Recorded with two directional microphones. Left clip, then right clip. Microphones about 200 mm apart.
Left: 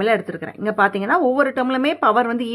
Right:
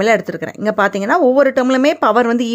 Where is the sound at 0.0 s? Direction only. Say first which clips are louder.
Right 5 dB; 40° right (ahead or behind).